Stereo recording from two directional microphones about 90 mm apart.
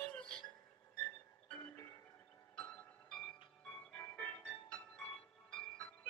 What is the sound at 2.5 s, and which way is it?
Music, 10° left (ahead or behind).